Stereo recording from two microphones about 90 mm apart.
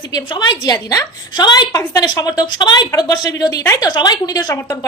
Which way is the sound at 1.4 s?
55° left (ahead or behind).